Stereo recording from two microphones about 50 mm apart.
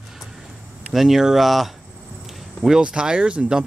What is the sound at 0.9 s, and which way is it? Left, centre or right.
Speech, centre.